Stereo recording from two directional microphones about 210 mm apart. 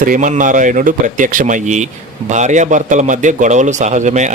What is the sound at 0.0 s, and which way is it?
A man's voice, 40° right (ahead or behind).